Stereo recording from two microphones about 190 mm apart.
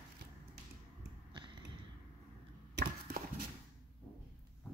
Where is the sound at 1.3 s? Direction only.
25° right (ahead or behind).